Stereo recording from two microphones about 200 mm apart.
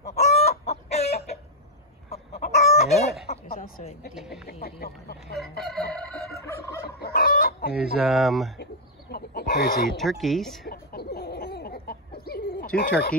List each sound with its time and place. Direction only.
0.1 s chicken: 35° left (ahead or behind)
2.9 s chicken: centre (ahead or behind)
3.4 s a sound: 45° left (ahead or behind)
4.1 s speech: centre (ahead or behind)
4.6 s speech: 50° left (ahead or behind)
5.6 s crowing: centre (ahead or behind)
7.0 s chicken: 50° left (ahead or behind)
8.0 s speech: centre (ahead or behind)
9.1 s chicken: 50° left (ahead or behind)
9.8 s speech: centre (ahead or behind)
10.7 s a sound: 50° left (ahead or behind)
12.3 s bird: 50° left (ahead or behind)